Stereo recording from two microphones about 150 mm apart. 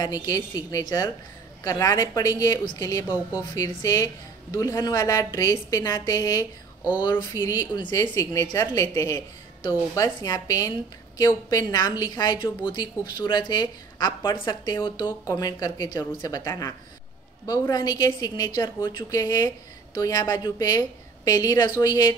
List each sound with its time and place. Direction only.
0.0 s a woman's voice: 25° left (ahead or behind)
7.7 s a woman's voice: 30° left (ahead or behind)